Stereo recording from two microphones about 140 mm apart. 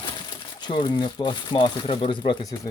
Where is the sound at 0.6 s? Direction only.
35° left (ahead or behind).